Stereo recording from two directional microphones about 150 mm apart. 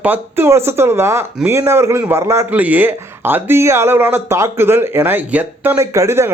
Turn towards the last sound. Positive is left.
turn(degrees=-15)  # may be behind; listen again after turning